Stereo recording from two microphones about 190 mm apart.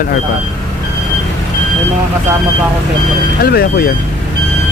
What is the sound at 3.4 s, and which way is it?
Speech, 55° left (ahead or behind).